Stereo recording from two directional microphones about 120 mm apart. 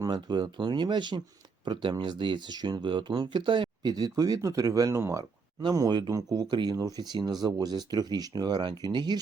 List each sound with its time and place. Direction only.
0.0 s speech: 35° right (ahead or behind)